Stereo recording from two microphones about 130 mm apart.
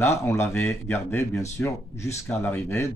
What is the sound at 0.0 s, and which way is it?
Speech, 20° left (ahead or behind).